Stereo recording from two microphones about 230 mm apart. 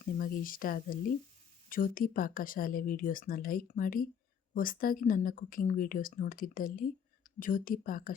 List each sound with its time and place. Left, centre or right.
0.0 s speech: left